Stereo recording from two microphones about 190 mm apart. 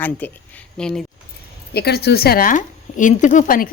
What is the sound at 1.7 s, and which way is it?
Speech, 55° left (ahead or behind).